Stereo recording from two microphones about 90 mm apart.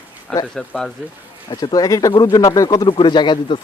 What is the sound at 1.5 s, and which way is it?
Speech, 50° left (ahead or behind).